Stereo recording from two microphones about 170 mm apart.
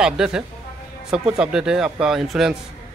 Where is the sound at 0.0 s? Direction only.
5° right (ahead or behind).